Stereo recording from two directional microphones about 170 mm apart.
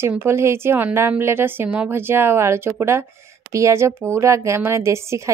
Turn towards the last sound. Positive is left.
turn(degrees=-15)  # may be behind; listen again after turning